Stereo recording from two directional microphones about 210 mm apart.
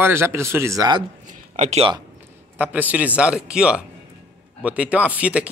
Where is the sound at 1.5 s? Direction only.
35° right (ahead or behind).